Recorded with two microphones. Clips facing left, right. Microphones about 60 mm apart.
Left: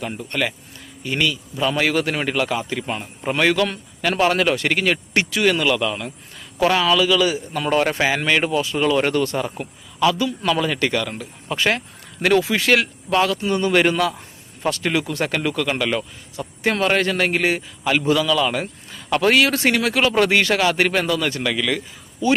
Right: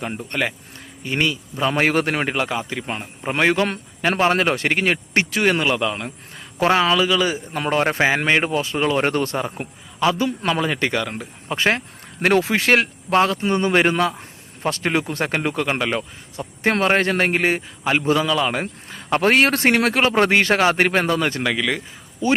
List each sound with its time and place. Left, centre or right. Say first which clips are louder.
0.0 s a man's voice: even; right